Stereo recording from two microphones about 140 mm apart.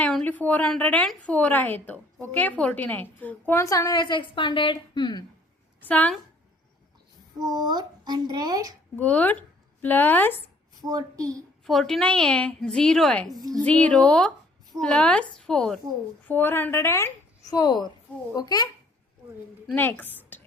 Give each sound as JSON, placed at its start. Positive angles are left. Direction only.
{"t": 0.0, "sound": "a woman's voice", "side_deg": 5}
{"t": 5.8, "sound": "a woman's voice", "side_deg": 10}
{"t": 7.5, "sound": "speech", "side_deg": -30}
{"t": 9.0, "sound": "a woman's voice", "side_deg": 10}
{"t": 10.8, "sound": "speech", "side_deg": -25}
{"t": 11.6, "sound": "a woman's voice", "side_deg": 0}
{"t": 13.3, "sound": "speech", "side_deg": -25}
{"t": 13.6, "sound": "a woman's voice", "side_deg": 10}
{"t": 19.7, "sound": "a woman's voice", "side_deg": 15}